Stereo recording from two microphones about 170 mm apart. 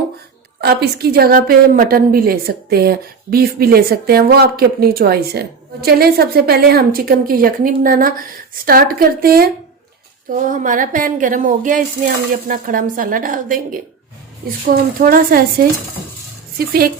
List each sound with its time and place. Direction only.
0.6 s a woman's voice: 70° right (ahead or behind)